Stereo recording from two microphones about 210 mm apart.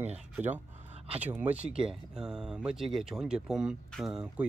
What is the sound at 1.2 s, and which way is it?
Speech, 10° right (ahead or behind).